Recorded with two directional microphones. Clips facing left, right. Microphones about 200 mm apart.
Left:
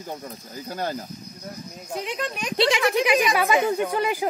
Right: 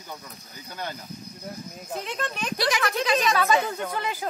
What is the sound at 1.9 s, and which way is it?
Speech, 5° left (ahead or behind).